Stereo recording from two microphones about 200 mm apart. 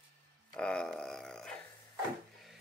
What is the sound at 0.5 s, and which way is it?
Speech, 5° left (ahead or behind).